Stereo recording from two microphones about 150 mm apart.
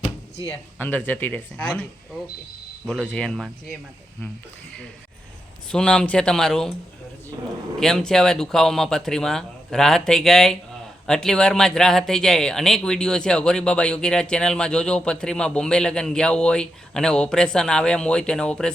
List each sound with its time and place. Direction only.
0.0 s a sound: 45° left (ahead or behind)
0.8 s speech: 10° left (ahead or behind)
2.8 s speech: 5° left (ahead or behind)
5.7 s speech: 5° left (ahead or behind)
7.8 s speech: 5° left (ahead or behind)